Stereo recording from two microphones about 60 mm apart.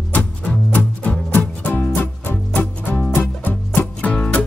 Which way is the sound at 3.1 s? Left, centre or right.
Left.